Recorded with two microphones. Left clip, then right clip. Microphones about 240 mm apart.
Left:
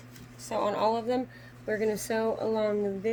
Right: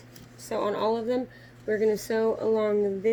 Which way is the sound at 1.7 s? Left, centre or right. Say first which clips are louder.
Right 4 dB; left.